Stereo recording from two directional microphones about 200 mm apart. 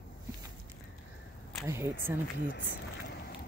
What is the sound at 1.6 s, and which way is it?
Speech, 15° right (ahead or behind).